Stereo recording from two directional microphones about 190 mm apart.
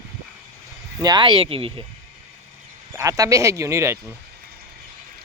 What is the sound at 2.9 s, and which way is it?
Speech, 15° right (ahead or behind).